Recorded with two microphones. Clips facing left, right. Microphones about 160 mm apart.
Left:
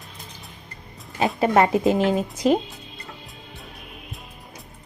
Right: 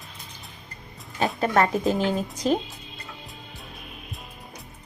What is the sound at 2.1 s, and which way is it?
Speech, 5° left (ahead or behind).